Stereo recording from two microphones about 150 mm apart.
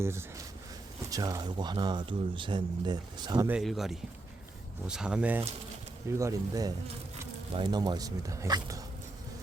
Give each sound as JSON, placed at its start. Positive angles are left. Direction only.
{"t": 0.0, "sound": "speech", "side_deg": -15}
{"t": 3.6, "sound": "speech", "side_deg": 0}
{"t": 6.1, "sound": "speech", "side_deg": -20}